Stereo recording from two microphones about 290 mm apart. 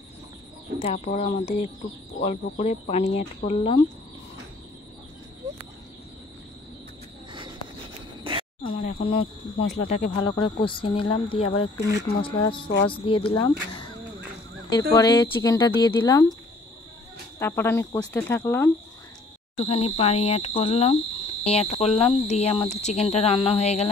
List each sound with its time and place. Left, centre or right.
0.7 s speech: left
8.2 s a sound: centre
8.7 s speech: left
9.7 s speech: left
10.2 s speech: centre
11.4 s speech: left
12.2 s speech: centre
17.4 s speech: centre
19.5 s speech: left